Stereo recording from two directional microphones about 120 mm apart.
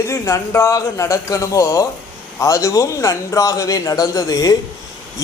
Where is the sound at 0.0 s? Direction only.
25° left (ahead or behind).